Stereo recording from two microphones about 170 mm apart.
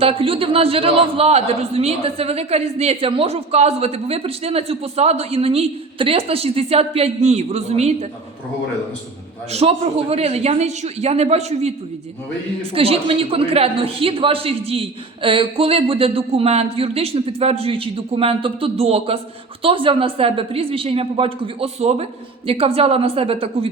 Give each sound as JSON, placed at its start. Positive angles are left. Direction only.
{"t": 0.0, "sound": "a man's voice", "side_deg": -30}
{"t": 9.5, "sound": "a man's voice", "side_deg": -35}
{"t": 12.7, "sound": "a man's voice", "side_deg": -35}